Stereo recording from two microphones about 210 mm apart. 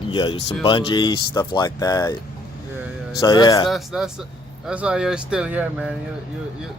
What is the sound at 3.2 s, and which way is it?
Speech, 20° left (ahead or behind).